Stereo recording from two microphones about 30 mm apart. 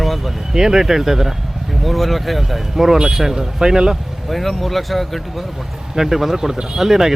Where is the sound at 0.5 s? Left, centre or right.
Centre.